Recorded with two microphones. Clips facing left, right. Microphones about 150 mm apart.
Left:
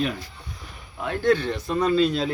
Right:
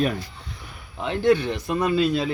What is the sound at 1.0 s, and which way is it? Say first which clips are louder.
A man's voice: right 2 dB; 20° right (ahead or behind).